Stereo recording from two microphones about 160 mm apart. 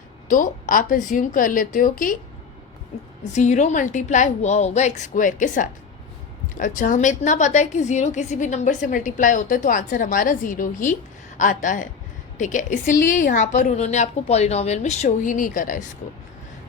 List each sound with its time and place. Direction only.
0.3 s a woman's voice: 55° left (ahead or behind)
3.3 s a woman's voice: 50° left (ahead or behind)